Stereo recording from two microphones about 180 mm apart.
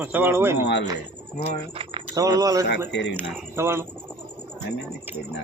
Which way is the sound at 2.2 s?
20° right (ahead or behind).